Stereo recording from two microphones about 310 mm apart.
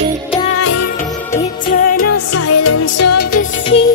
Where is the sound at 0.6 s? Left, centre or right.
Left.